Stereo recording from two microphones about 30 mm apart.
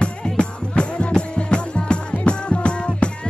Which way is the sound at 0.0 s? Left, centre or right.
Left.